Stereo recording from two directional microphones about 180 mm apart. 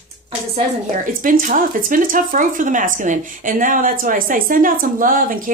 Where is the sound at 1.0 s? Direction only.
45° right (ahead or behind).